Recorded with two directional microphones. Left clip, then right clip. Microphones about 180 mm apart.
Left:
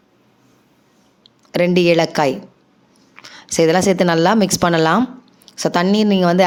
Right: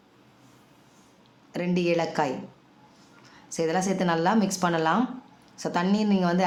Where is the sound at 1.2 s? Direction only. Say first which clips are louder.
Left 15 dB; 40° left (ahead or behind).